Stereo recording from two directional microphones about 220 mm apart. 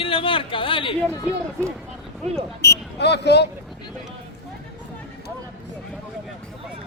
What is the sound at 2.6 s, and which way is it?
Speech, 50° left (ahead or behind).